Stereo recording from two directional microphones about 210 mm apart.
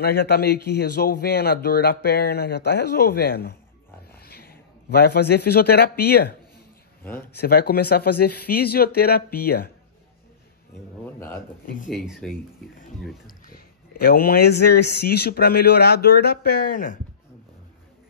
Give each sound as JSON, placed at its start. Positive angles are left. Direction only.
{"t": 0.0, "sound": "a man's voice", "side_deg": 50}
{"t": 7.0, "sound": "speech", "side_deg": 10}
{"t": 7.3, "sound": "a man's voice", "side_deg": 50}
{"t": 11.6, "sound": "speech", "side_deg": 40}
{"t": 11.9, "sound": "speech", "side_deg": 0}
{"t": 13.5, "sound": "a man's voice", "side_deg": 45}